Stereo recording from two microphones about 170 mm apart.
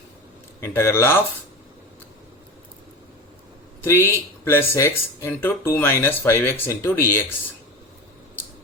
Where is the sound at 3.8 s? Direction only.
15° left (ahead or behind).